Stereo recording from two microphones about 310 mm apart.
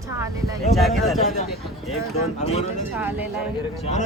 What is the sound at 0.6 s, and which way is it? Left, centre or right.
Speech, centre.